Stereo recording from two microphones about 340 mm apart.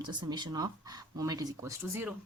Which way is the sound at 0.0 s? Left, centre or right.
Centre.